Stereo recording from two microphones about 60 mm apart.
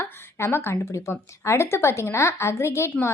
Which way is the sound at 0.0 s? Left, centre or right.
Left.